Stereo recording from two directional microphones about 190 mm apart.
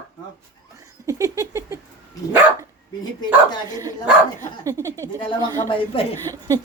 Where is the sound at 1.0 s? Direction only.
15° right (ahead or behind).